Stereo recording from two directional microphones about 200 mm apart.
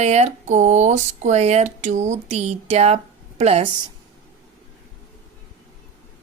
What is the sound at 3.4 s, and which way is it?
Speech, 30° right (ahead or behind).